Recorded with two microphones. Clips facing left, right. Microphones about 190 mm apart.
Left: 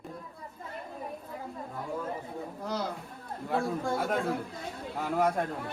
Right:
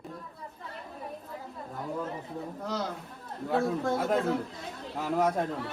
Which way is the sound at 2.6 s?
Centre (ahead or behind).